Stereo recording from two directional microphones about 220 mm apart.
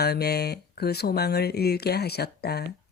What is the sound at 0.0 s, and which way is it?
Speech, 45° left (ahead or behind).